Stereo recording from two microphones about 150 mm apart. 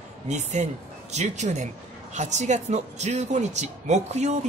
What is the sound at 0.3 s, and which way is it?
A woman's voice, 50° right (ahead or behind).